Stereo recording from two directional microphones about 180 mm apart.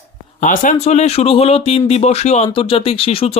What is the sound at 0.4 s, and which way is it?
Speech, 45° left (ahead or behind).